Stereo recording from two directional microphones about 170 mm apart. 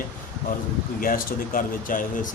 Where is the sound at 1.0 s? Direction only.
55° left (ahead or behind).